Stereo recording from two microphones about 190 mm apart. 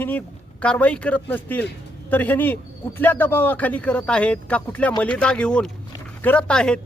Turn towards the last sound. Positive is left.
turn(degrees=5)  # may be behind; listen again after turning